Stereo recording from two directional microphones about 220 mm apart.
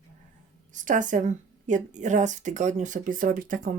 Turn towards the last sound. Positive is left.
turn(degrees=-40)  # may be behind; listen again after turning